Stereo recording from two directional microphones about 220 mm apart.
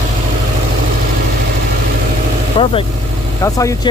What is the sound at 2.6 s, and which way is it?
Vehicle, 25° left (ahead or behind).